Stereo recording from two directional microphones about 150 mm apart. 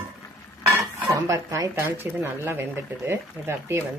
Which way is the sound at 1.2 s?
20° right (ahead or behind).